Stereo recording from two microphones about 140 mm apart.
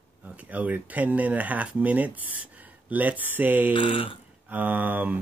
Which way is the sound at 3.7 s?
35° left (ahead or behind).